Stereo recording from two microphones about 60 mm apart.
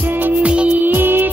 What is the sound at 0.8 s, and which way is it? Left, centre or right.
Music, right.